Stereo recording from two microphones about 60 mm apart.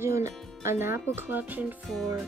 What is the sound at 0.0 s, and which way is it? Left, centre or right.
Speech, right.